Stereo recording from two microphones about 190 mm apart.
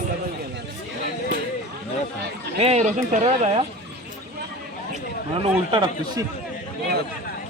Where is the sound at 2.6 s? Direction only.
35° right (ahead or behind).